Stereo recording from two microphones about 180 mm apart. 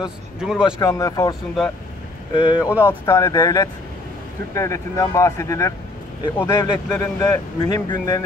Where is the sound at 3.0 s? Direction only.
15° left (ahead or behind).